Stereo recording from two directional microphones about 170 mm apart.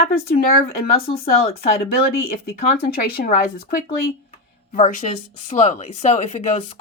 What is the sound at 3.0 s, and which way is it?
A woman's voice, 65° left (ahead or behind).